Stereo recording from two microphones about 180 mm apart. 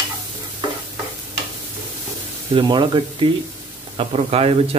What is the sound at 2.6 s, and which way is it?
Speech, 25° right (ahead or behind).